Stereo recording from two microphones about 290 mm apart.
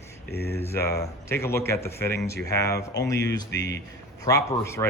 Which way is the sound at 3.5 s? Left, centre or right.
Left.